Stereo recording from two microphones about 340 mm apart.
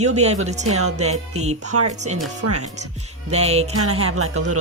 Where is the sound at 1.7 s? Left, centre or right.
Right.